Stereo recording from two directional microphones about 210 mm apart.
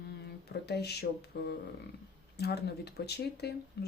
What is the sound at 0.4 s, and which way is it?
Speech, 50° left (ahead or behind).